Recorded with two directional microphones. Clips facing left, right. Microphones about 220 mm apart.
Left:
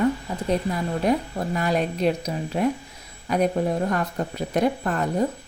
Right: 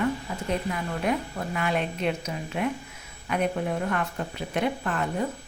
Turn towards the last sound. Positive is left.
turn(degrees=40)  # may be behind; listen again after turning